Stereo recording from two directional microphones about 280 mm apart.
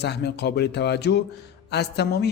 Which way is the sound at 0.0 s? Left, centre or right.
Left.